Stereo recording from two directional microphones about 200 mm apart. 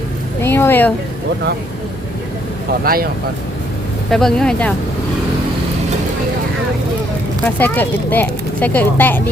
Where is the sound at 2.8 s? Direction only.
45° right (ahead or behind).